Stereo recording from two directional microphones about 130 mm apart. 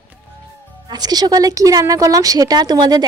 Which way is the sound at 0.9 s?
30° right (ahead or behind).